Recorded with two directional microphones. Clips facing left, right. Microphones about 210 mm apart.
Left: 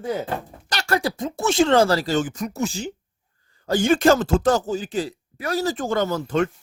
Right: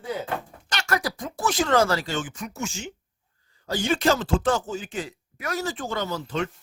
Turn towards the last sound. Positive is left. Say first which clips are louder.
# left 7 dB
turn(degrees=50)  # may be behind; listen again after turning